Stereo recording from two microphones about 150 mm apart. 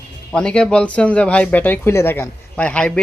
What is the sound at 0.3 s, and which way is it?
Speech, 5° left (ahead or behind).